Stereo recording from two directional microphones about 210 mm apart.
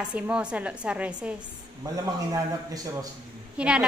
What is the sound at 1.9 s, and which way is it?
A man's voice, 15° right (ahead or behind).